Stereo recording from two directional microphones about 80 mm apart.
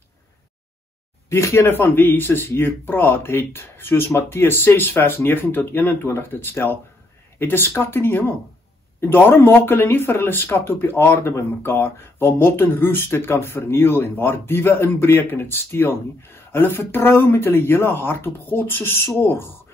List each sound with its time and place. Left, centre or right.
1.3 s speech: left